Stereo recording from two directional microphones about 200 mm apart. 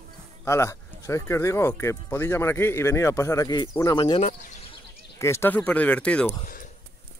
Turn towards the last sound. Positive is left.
turn(degrees=5)  # may be behind; listen again after turning